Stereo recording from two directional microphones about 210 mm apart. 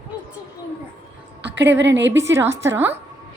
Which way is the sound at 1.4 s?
55° right (ahead or behind).